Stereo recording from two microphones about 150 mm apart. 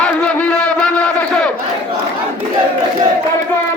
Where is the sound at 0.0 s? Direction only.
10° left (ahead or behind).